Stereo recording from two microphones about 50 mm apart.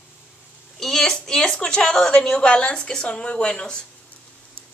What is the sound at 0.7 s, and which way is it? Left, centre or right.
A woman's voice, centre.